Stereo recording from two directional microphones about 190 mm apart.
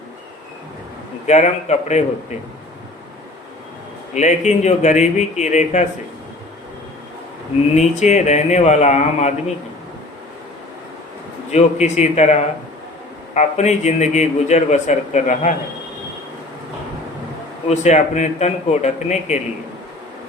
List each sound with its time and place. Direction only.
1.3 s a man's voice: 35° left (ahead or behind)
4.1 s a man's voice: 40° left (ahead or behind)
7.8 s a man's voice: 35° left (ahead or behind)
11.5 s a man's voice: 35° left (ahead or behind)
17.7 s a man's voice: 35° left (ahead or behind)